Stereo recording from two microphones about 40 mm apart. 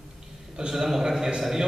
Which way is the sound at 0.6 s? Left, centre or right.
Centre.